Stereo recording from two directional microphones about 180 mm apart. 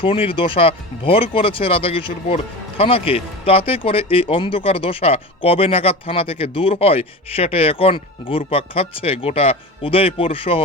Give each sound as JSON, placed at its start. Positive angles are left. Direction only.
{"t": 0.0, "sound": "speech", "side_deg": 30}